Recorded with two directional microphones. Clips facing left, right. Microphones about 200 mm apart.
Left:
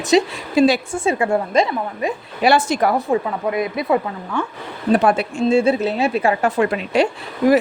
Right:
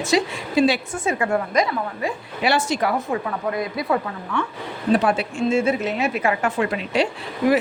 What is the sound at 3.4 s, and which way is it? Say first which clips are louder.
Speech: left 3 dB; 20° left (ahead or behind).